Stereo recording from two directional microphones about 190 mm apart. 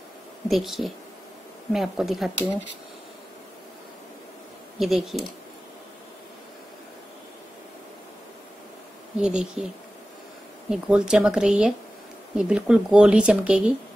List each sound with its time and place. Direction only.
0.5 s speech: centre (ahead or behind)
4.7 s speech: centre (ahead or behind)
9.2 s speech: 5° right (ahead or behind)
10.7 s speech: 5° right (ahead or behind)